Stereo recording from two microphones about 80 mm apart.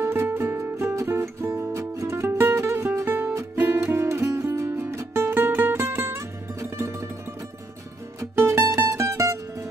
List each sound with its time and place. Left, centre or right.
0.0 s music: right
8.4 s music: right